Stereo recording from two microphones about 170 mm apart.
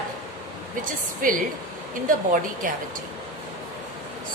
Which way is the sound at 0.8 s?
55° right (ahead or behind).